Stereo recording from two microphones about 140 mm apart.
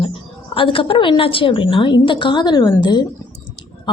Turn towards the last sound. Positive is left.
turn(degrees=35)  # may be behind; listen again after turning